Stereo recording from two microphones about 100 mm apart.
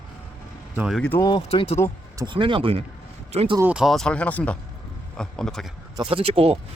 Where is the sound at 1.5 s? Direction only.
85° left.